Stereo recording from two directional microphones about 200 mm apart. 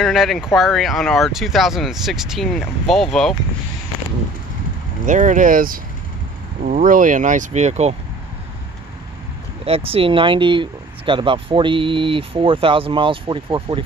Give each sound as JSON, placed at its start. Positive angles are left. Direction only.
{"t": 0.0, "sound": "speech", "side_deg": 0}
{"t": 5.0, "sound": "speech", "side_deg": -40}
{"t": 9.7, "sound": "speech", "side_deg": -30}